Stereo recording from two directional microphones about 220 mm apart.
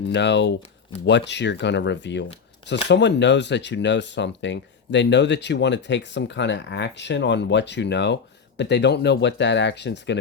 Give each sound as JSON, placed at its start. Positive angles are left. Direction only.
{"t": 0.1, "sound": "speech", "side_deg": 50}